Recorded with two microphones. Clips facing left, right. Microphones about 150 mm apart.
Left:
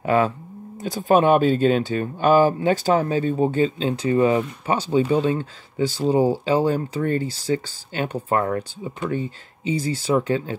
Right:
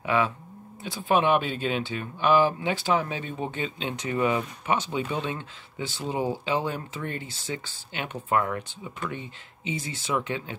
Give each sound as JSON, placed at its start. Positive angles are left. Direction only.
{"t": 0.0, "sound": "speech", "side_deg": 45}